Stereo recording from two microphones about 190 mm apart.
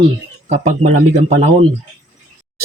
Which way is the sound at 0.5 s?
40° right (ahead or behind).